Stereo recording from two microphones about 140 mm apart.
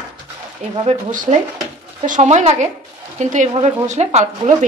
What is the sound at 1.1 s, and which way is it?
Speech, 70° right (ahead or behind).